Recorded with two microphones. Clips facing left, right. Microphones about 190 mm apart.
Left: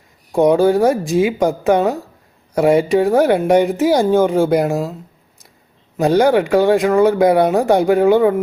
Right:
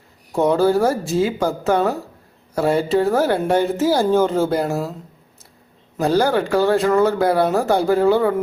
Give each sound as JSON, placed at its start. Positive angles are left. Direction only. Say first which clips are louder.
{"t": 0.3, "sound": "speech", "louder": "left 4 dB", "side_deg": 15}
{"t": 6.0, "sound": "speech", "louder": "left 4 dB", "side_deg": 20}